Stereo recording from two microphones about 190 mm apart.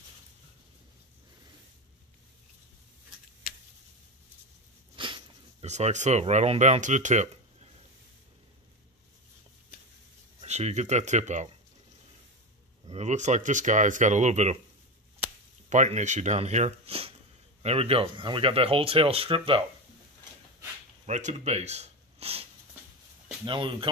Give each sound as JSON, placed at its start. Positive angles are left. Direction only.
{"t": 4.9, "sound": "a sound", "side_deg": -25}
{"t": 5.7, "sound": "speech", "side_deg": -35}
{"t": 10.4, "sound": "speech", "side_deg": -35}
{"t": 12.8, "sound": "speech", "side_deg": -35}
{"t": 15.7, "sound": "speech", "side_deg": -40}
{"t": 21.0, "sound": "speech", "side_deg": -35}